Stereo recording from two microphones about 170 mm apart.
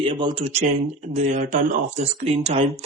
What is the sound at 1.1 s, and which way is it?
Speech, 45° right (ahead or behind).